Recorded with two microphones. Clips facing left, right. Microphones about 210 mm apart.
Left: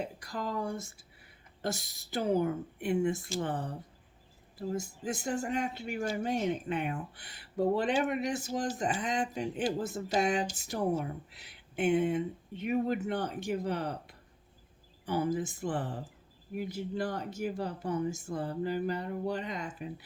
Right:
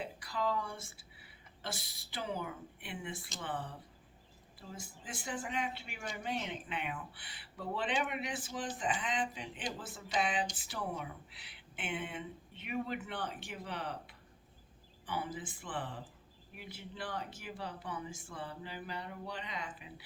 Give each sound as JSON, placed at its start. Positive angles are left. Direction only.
{"t": 0.0, "sound": "speech", "side_deg": 45}